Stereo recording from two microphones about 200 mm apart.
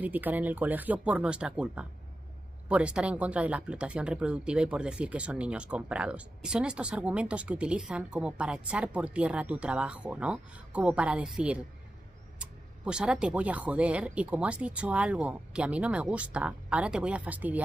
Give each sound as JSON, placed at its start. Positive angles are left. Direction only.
{"t": 0.0, "sound": "speech", "side_deg": -10}